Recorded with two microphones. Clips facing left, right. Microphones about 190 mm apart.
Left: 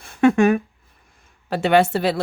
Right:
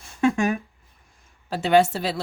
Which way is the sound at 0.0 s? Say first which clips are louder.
Left 6 dB; 60° left (ahead or behind).